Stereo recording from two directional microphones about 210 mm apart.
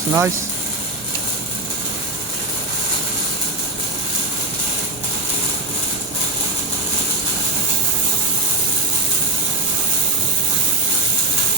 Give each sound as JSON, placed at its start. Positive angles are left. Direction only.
{"t": 0.1, "sound": "speech", "side_deg": -15}